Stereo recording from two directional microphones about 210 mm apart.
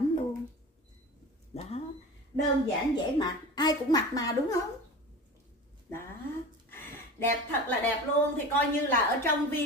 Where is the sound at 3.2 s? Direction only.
20° left (ahead or behind).